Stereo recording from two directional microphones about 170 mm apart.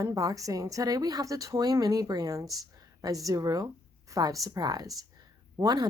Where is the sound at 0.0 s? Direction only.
20° right (ahead or behind).